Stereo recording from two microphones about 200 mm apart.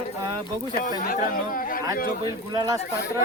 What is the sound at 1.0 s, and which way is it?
Speech, 45° left (ahead or behind).